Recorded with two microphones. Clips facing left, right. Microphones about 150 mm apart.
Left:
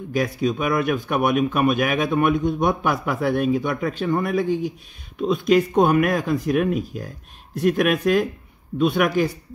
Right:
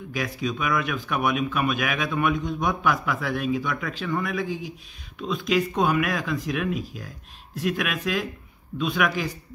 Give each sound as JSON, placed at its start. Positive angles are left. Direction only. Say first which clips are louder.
{"t": 0.1, "sound": "a man's voice", "louder": "left 7 dB", "side_deg": 45}